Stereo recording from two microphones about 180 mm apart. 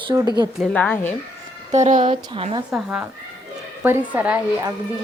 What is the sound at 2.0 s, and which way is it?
Speech, 30° right (ahead or behind).